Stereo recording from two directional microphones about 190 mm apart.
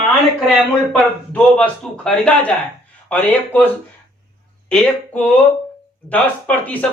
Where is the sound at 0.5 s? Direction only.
5° left (ahead or behind).